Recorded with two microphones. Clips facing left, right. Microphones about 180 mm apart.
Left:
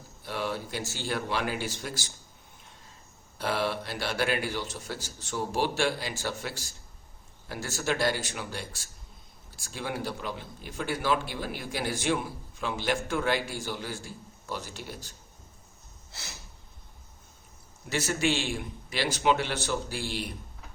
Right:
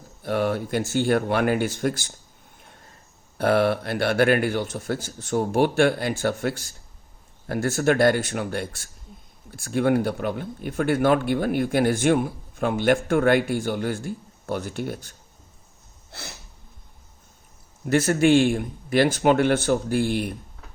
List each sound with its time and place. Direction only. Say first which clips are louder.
0.2 s speech: right 9 dB; 55° right (ahead or behind)
3.3 s speech: right 10 dB; 55° right (ahead or behind)
17.8 s speech: right 10 dB; 55° right (ahead or behind)